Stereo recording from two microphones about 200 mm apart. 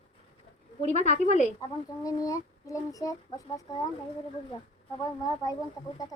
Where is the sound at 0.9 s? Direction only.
35° right (ahead or behind).